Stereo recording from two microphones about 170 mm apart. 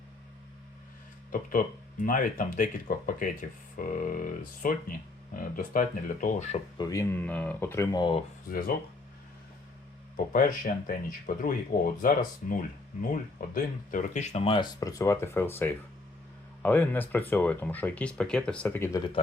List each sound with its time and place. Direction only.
1.3 s speech: 55° left (ahead or behind)
6.7 s speech: 20° left (ahead or behind)
8.4 s speech: 60° left (ahead or behind)
10.3 s speech: 55° left (ahead or behind); by 19.1 s 20° left (ahead or behind)